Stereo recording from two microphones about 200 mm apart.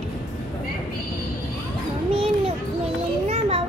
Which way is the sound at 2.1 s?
30° right (ahead or behind).